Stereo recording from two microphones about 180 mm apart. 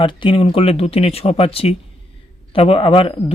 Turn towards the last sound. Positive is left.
turn(degrees=30)  # may be behind; listen again after turning